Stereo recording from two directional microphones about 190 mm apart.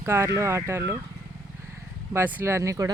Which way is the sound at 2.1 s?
15° right (ahead or behind).